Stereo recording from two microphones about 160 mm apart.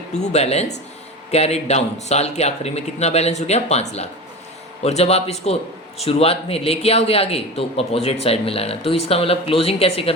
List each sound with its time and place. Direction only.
0.1 s a man's voice: 45° left (ahead or behind)